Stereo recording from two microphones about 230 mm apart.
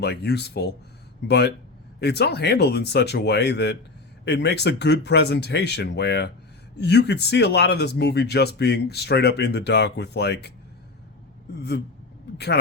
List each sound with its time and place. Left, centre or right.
0.0 s speech: left
2.0 s speech: left